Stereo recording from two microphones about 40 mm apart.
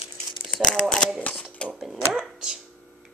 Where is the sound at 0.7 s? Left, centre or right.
Centre.